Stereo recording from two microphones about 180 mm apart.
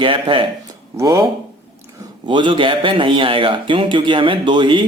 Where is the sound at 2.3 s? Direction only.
25° right (ahead or behind).